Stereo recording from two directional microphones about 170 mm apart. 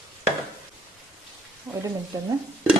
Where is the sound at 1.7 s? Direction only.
20° right (ahead or behind).